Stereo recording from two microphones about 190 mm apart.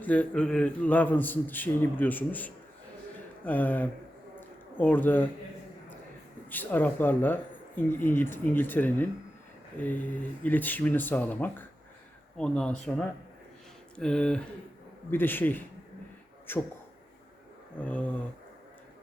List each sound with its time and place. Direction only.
0.0 s a man's voice: 5° left (ahead or behind)
4.4 s a sound: 10° left (ahead or behind)
6.5 s a man's voice: 10° left (ahead or behind)
13.9 s a man's voice: 5° left (ahead or behind)
17.7 s a man's voice: 5° left (ahead or behind)